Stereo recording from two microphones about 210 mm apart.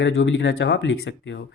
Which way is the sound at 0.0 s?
60° left (ahead or behind).